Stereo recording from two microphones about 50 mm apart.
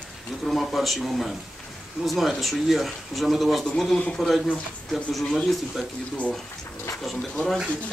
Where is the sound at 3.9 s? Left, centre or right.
Centre.